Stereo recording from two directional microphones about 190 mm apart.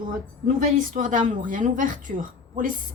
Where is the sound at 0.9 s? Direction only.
45° right (ahead or behind).